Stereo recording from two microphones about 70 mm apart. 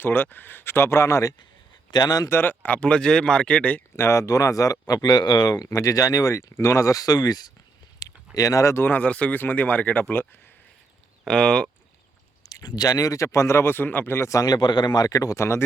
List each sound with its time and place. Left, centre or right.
0.0 s speech: left
1.9 s speech: left
2.3 s speech: left
3.9 s speech: left
5.7 s speech: left
8.0 s a sound: left
8.4 s speech: left
8.7 s speech: left
9.0 s speech: centre
11.3 s speech: centre
12.5 s speech: left
14.3 s speech: left
15.4 s speech: left